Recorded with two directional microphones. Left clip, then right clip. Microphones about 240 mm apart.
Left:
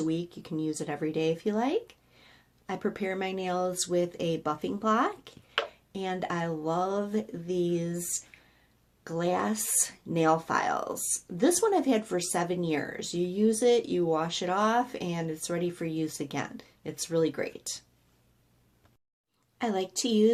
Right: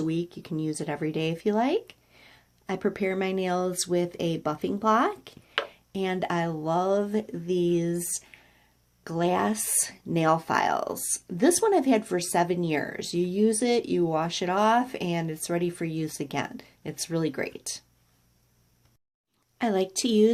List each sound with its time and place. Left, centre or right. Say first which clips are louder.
0.0 s speech: right 2 dB; right
8.3 s a sound: right 3 dB; right
9.0 s speech: right 3 dB; right
19.5 s speech: right 4 dB; right